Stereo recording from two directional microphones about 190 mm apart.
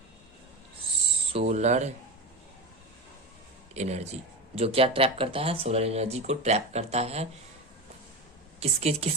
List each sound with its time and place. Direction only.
1.3 s speech: 35° right (ahead or behind)
3.8 s speech: 35° right (ahead or behind)
8.6 s speech: 35° right (ahead or behind)